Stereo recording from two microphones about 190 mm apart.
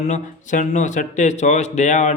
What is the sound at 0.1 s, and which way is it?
Speech, 40° left (ahead or behind).